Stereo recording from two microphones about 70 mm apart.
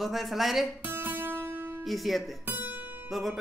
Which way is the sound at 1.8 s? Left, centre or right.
Centre.